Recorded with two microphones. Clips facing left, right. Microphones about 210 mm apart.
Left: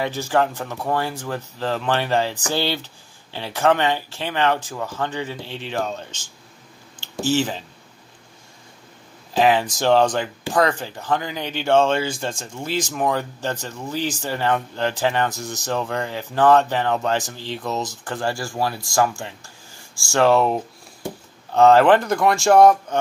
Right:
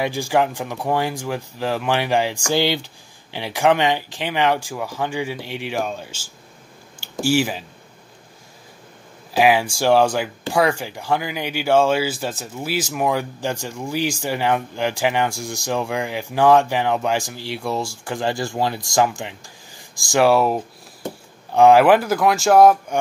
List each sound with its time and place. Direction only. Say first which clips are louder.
0.0 s speech: right 1 dB; 15° right (ahead or behind)
9.3 s speech: right 1 dB; 10° right (ahead or behind)